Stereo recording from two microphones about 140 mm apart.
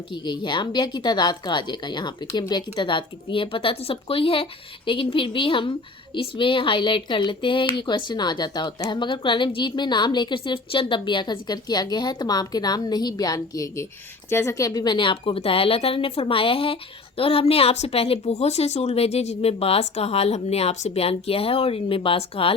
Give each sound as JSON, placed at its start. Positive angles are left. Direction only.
{"t": 0.1, "sound": "a woman's voice", "side_deg": 35}